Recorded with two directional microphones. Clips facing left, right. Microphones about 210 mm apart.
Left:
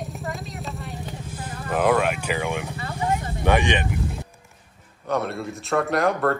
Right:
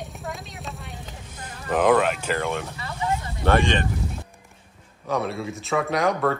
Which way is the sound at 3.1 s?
15° left (ahead or behind).